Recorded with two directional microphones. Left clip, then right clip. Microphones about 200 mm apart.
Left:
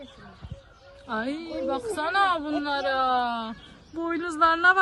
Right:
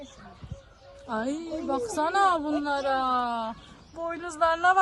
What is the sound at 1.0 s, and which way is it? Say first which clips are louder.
A woman's voice: even; 15° right (ahead or behind).